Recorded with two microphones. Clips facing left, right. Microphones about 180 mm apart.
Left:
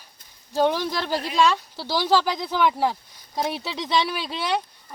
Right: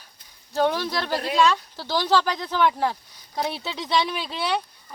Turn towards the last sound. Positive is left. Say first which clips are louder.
# even
turn(degrees=15)  # may be behind; listen again after turning